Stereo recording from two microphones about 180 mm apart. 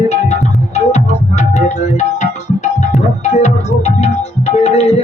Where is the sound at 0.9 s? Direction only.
40° left (ahead or behind).